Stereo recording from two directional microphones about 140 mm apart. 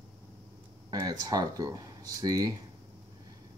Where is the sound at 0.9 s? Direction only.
30° right (ahead or behind).